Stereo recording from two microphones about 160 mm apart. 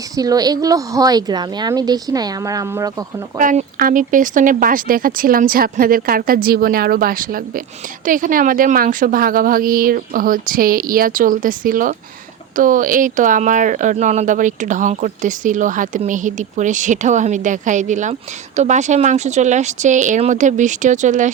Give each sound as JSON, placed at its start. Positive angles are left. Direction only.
{"t": 0.2, "sound": "a woman's voice", "side_deg": -25}
{"t": 3.3, "sound": "speech", "side_deg": -50}